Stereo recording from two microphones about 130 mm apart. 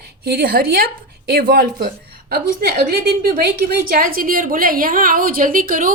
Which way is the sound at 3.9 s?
90° right.